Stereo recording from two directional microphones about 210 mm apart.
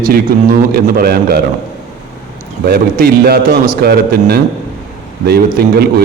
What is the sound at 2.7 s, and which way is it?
A man's voice, 45° right (ahead or behind).